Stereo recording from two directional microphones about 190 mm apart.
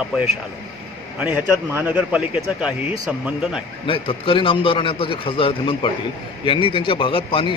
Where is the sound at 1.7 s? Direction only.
5° right (ahead or behind).